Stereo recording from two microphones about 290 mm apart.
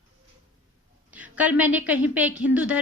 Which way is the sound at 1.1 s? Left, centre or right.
Centre.